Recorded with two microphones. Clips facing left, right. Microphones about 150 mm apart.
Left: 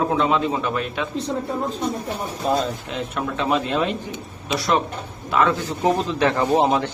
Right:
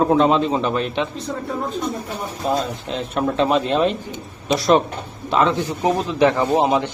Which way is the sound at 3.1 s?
30° right (ahead or behind).